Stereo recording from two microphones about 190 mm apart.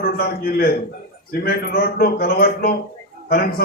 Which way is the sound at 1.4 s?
50° left (ahead or behind).